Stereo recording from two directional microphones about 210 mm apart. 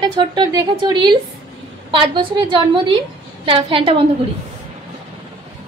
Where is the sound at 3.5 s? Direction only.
25° right (ahead or behind).